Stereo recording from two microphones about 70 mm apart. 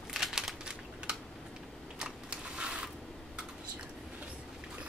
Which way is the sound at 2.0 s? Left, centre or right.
Centre.